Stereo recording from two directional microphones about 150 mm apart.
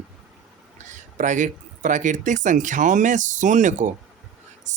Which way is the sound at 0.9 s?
55° right (ahead or behind).